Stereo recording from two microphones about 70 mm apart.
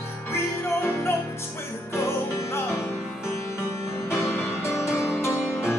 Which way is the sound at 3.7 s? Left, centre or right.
Left.